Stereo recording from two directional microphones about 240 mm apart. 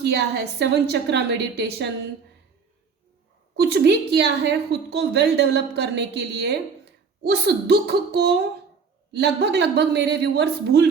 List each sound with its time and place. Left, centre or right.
0.0 s a woman's voice: right
3.6 s a woman's voice: right